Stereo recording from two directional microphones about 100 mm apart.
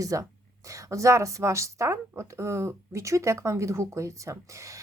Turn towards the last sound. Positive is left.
turn(degrees=-30)  # may be behind; listen again after turning